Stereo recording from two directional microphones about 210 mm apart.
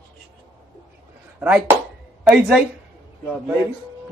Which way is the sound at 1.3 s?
5° right (ahead or behind).